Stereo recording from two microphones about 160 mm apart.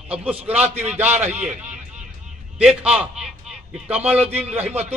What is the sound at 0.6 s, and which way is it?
Speech, 45° right (ahead or behind).